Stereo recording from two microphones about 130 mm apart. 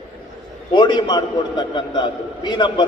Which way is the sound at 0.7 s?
35° left (ahead or behind).